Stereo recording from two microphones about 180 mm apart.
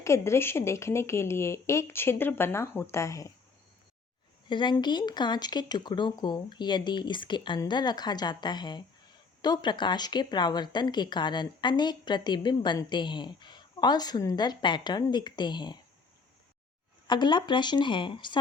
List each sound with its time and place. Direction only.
0.0 s a woman's voice: 15° left (ahead or behind)
4.4 s speech: 25° left (ahead or behind)
17.1 s speech: 25° left (ahead or behind)